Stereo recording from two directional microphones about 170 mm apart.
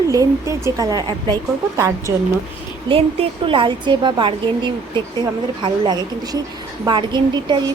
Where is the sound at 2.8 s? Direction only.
30° right (ahead or behind).